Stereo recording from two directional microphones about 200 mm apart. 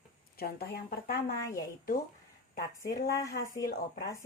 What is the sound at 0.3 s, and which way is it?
Speech, 50° left (ahead or behind).